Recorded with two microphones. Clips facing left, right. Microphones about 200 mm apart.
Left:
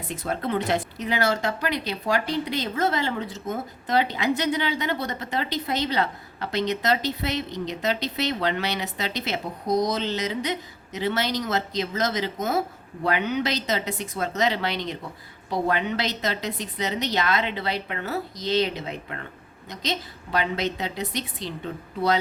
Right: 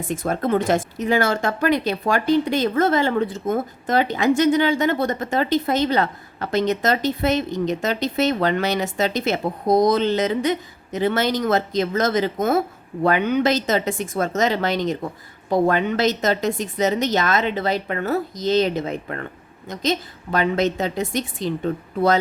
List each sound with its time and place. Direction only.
0.1 s speech: 50° right (ahead or behind)